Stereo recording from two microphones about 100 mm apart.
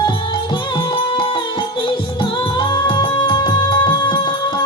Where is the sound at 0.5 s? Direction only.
50° left (ahead or behind).